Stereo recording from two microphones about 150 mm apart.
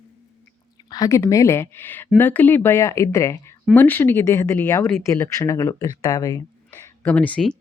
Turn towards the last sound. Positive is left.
turn(degrees=10)  # may be behind; listen again after turning